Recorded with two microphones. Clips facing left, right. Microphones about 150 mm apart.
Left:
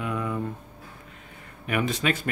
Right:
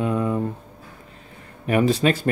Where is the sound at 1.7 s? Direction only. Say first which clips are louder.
Right 7 dB; 35° right (ahead or behind).